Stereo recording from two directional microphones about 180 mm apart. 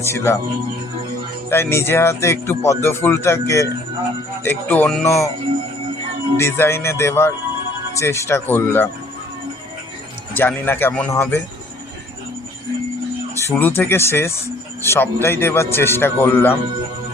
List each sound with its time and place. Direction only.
0.0 s speech: 15° left (ahead or behind)
1.5 s speech: 15° left (ahead or behind)
5.0 s speech: 15° left (ahead or behind)
6.3 s speech: 15° left (ahead or behind)
10.3 s speech: 10° left (ahead or behind)
13.3 s speech: 10° left (ahead or behind)